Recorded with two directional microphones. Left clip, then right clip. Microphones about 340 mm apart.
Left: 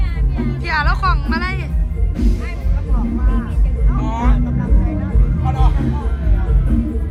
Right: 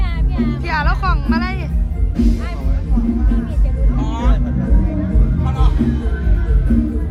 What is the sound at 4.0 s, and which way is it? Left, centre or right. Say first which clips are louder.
Vehicle: left 2 dB; left.